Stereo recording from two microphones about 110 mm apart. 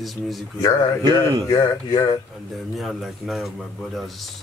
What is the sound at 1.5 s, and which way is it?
Speech, 35° left (ahead or behind).